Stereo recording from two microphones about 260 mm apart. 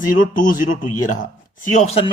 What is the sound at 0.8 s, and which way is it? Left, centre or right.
Speech, left.